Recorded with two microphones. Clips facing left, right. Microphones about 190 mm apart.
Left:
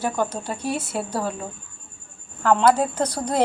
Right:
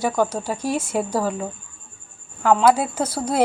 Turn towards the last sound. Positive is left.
turn(degrees=-5)  # may be behind; listen again after turning